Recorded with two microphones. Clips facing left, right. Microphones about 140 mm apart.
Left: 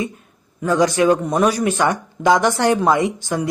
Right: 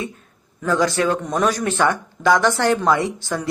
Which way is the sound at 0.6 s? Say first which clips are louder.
Left 3 dB; 15° left (ahead or behind).